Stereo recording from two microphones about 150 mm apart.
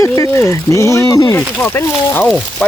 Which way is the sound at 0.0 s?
20° left (ahead or behind).